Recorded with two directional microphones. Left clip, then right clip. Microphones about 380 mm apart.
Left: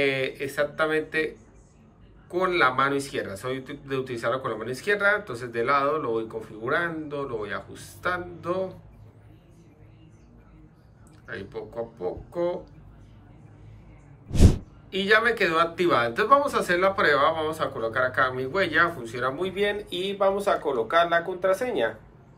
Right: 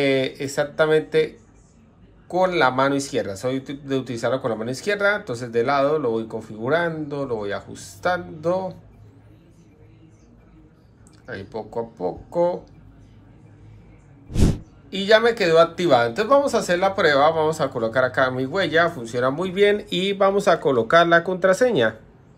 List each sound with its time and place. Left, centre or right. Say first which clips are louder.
0.0 s speech: right 4 dB; centre
11.2 s speech: right 4 dB; centre
14.3 s a sound: right 1 dB; centre
14.9 s speech: right 4 dB; centre